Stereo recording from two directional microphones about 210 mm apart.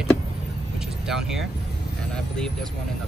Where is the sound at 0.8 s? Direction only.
Centre (ahead or behind).